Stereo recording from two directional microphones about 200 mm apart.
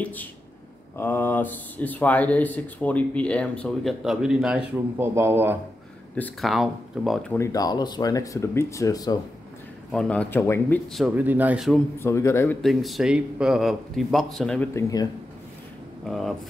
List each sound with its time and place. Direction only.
0.0 s speech: 10° left (ahead or behind); by 5.6 s 10° right (ahead or behind)
6.1 s a man's voice: 5° left (ahead or behind)
7.3 s speech: 15° left (ahead or behind)
9.8 s speech: 5° left (ahead or behind)
10.9 s a man's voice: centre (ahead or behind)
12.0 s speech: 15° left (ahead or behind)
12.6 s a man's voice: centre (ahead or behind); by 15.0 s 15° left (ahead or behind)
16.1 s a man's voice: centre (ahead or behind)